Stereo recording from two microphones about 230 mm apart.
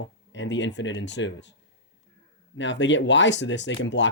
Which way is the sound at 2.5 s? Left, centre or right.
Left.